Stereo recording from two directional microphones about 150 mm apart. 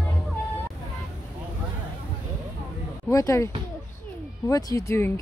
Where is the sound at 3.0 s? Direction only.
20° left (ahead or behind).